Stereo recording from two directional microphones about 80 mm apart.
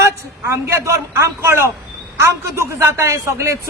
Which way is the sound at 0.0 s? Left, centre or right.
Right.